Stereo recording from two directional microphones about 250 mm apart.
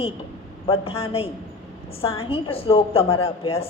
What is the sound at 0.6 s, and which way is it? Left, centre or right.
A woman's voice, left.